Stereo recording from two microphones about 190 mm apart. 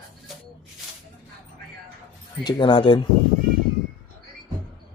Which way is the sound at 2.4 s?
25° left (ahead or behind).